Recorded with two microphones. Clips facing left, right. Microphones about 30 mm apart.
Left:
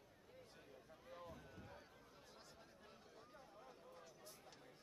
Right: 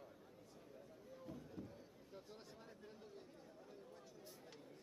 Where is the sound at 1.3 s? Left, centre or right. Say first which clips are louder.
Right 5 dB; left.